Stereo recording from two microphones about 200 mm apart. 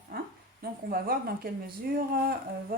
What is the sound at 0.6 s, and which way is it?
Speech, 50° right (ahead or behind).